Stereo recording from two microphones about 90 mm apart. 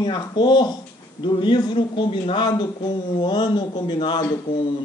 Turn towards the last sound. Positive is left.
turn(degrees=60)  # may be behind; listen again after turning